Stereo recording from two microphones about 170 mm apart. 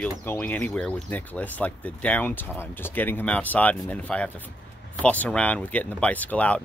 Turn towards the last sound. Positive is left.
turn(degrees=10)  # may be behind; listen again after turning